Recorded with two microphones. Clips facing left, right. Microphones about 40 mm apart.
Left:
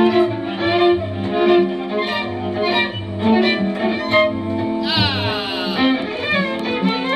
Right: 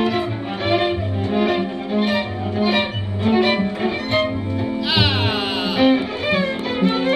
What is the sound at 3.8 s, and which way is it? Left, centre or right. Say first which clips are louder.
Music: left 4 dB; centre.